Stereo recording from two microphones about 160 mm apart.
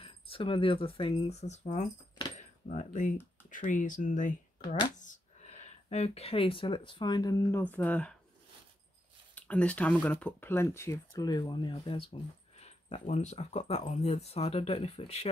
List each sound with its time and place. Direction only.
0.0 s speech: 35° left (ahead or behind)
2.3 s cutlery: 50° left (ahead or behind)
3.4 s speech: 55° left (ahead or behind); by 7.6 s 20° left (ahead or behind)
7.6 s speech: 10° left (ahead or behind)
9.3 s speech: 10° left (ahead or behind); by 15.2 s 40° left (ahead or behind)